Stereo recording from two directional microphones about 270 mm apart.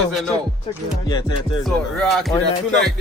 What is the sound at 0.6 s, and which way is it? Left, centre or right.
Music, centre.